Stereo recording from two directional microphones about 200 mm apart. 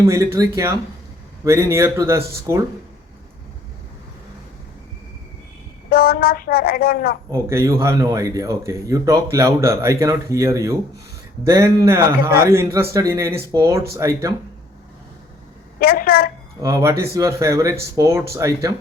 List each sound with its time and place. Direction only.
0.0 s speech: 15° right (ahead or behind)
5.9 s speech: 50° left (ahead or behind)
7.3 s speech: 15° right (ahead or behind)
15.8 s speech: 50° left (ahead or behind)
16.6 s speech: 15° right (ahead or behind)